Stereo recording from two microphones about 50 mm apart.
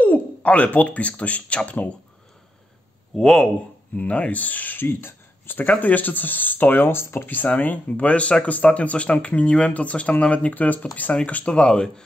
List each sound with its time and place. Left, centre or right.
0.0 s speech: left
3.2 s speech: centre
3.9 s speech: left
4.7 s speech: left
7.4 s speech: left
11.5 s speech: centre